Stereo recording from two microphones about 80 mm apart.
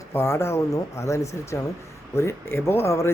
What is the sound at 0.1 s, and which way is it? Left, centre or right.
Speech, left.